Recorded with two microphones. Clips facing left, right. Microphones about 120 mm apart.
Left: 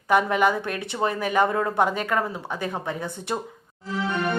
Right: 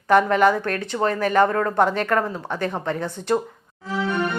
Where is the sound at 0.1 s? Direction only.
10° left (ahead or behind).